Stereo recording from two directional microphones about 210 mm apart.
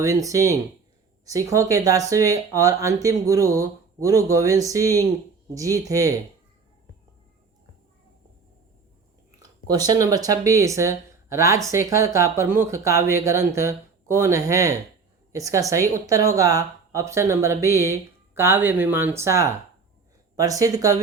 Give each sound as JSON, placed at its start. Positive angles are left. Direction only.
{"t": 0.0, "sound": "speech", "side_deg": -15}
{"t": 9.6, "sound": "speech", "side_deg": -15}